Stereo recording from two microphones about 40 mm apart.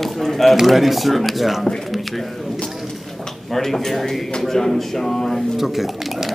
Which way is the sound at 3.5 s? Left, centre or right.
Centre.